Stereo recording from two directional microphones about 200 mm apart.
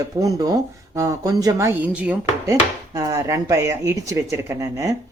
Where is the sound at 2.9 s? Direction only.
15° right (ahead or behind).